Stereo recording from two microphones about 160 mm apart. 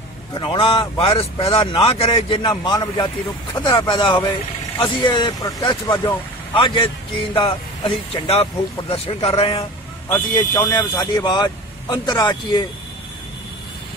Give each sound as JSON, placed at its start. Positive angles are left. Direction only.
{"t": 0.3, "sound": "a man's voice", "side_deg": 30}
{"t": 10.0, "sound": "speech", "side_deg": 15}
{"t": 10.6, "sound": "speech", "side_deg": 25}